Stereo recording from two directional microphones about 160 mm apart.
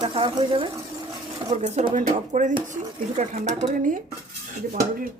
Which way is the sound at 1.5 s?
45° right (ahead or behind).